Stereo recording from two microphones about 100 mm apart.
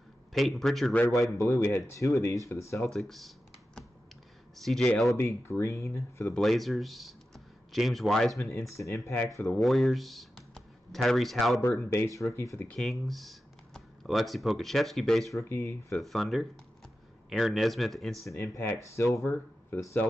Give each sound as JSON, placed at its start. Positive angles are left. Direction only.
{"t": 0.3, "sound": "speech", "side_deg": 0}
{"t": 1.4, "sound": "speech", "side_deg": 25}
{"t": 2.9, "sound": "computer keyboard", "side_deg": 0}
{"t": 4.6, "sound": "speech", "side_deg": 5}
{"t": 5.1, "sound": "speech", "side_deg": 25}
{"t": 6.3, "sound": "speech", "side_deg": 0}
{"t": 8.4, "sound": "speech", "side_deg": 30}
{"t": 9.6, "sound": "speech", "side_deg": 0}
{"t": 11.8, "sound": "speech", "side_deg": 25}
{"t": 12.7, "sound": "speech", "side_deg": 5}
{"t": 15.4, "sound": "speech", "side_deg": 20}
{"t": 16.0, "sound": "speech", "side_deg": 0}
{"t": 18.2, "sound": "speech", "side_deg": 30}